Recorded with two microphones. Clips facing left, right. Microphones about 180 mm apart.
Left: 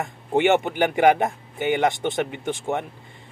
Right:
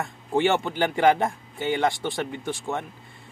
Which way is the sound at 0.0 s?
20° left (ahead or behind).